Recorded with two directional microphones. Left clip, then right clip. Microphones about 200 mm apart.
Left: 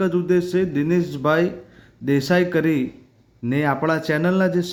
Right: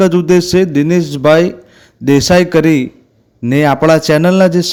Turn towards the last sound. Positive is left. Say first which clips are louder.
# right 10 dB
turn(degrees=-50)  # may be behind; listen again after turning